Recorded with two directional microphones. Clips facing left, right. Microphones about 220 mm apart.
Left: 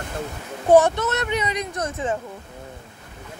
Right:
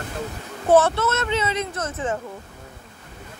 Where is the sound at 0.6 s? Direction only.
15° left (ahead or behind).